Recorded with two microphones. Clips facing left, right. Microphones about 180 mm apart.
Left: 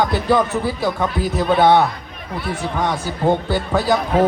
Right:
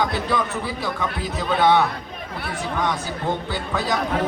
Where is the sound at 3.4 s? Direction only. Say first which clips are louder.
Left 7 dB; 30° left (ahead or behind).